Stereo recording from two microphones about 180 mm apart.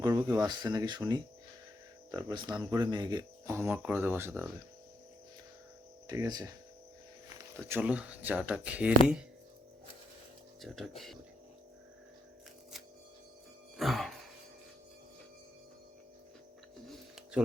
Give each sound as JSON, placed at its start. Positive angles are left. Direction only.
{"t": 0.0, "sound": "speech", "side_deg": -15}
{"t": 6.1, "sound": "speech", "side_deg": -20}
{"t": 7.5, "sound": "speech", "side_deg": -10}
{"t": 10.6, "sound": "speech", "side_deg": 0}
{"t": 13.7, "sound": "music", "side_deg": 0}
{"t": 16.8, "sound": "a sound", "side_deg": 0}